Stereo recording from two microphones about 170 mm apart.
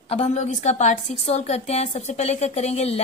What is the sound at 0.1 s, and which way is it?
Speech, 40° left (ahead or behind).